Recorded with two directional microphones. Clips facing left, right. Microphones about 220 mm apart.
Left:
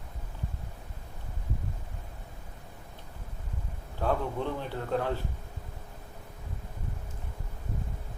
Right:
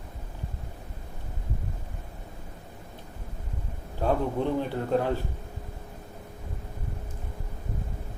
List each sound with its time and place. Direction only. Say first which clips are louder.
4.0 s a man's voice: right 4 dB; 15° right (ahead or behind)